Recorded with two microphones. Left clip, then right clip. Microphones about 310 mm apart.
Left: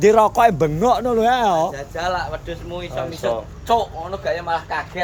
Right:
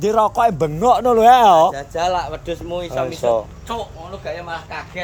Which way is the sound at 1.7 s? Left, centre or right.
Right.